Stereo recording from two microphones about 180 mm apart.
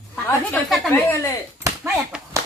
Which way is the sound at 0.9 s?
15° left (ahead or behind).